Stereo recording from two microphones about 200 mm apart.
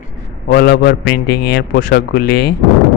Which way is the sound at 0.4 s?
50° left (ahead or behind).